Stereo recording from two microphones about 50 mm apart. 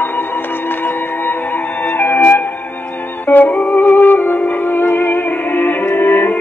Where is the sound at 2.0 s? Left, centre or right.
Left.